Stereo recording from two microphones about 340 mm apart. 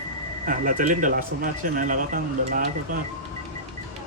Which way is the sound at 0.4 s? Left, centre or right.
Right.